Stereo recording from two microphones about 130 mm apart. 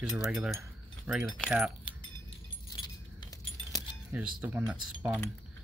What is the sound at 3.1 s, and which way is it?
Keys jangling, 30° left (ahead or behind).